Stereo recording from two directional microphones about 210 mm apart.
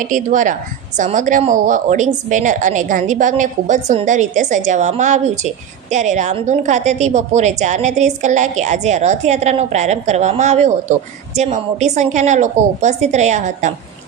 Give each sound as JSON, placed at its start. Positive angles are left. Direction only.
{"t": 0.0, "sound": "a woman's voice", "side_deg": -35}